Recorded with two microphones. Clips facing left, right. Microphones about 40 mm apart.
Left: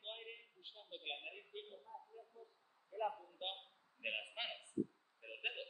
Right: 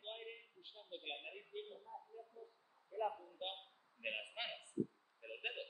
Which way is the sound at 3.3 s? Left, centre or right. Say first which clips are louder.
Even; centre.